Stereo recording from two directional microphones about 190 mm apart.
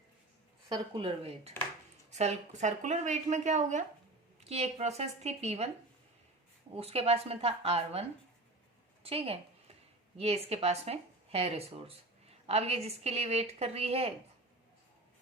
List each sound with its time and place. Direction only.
0.7 s a woman's voice: 30° right (ahead or behind)
6.7 s a woman's voice: 35° right (ahead or behind)
9.0 s a woman's voice: 30° right (ahead or behind)